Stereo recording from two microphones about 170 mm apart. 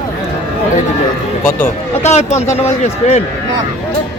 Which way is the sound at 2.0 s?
40° left (ahead or behind).